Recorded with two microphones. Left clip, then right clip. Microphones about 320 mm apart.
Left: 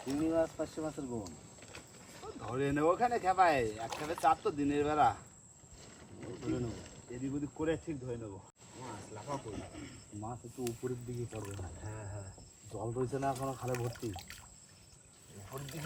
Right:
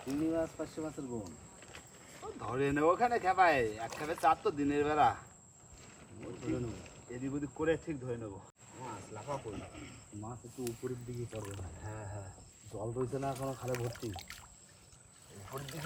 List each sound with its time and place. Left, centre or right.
0.2 s speech: centre
2.4 s speech: centre
6.1 s a man's voice: left
7.1 s speech: centre
9.2 s speech: left
10.2 s speech: centre
15.4 s speech: centre